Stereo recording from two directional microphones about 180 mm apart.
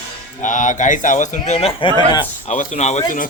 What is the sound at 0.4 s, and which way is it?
A man's voice, 45° left (ahead or behind).